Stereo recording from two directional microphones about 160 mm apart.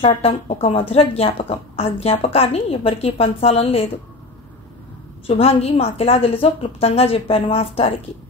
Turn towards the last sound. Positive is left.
turn(degrees=35)  # may be behind; listen again after turning